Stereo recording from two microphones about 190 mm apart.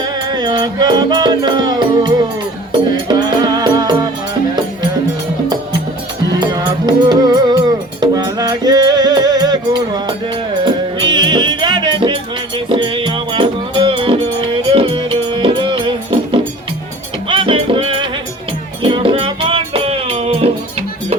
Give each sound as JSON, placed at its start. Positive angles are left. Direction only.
{"t": 0.0, "sound": "music", "side_deg": -25}
{"t": 6.4, "sound": "music", "side_deg": -20}